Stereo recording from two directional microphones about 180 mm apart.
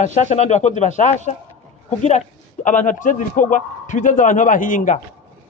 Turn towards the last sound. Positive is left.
turn(degrees=45)  # may be behind; listen again after turning